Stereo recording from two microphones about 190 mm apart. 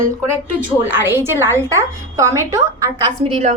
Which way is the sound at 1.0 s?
10° right (ahead or behind).